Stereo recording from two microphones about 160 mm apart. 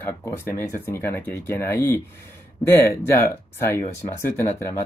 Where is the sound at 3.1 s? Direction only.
15° left (ahead or behind).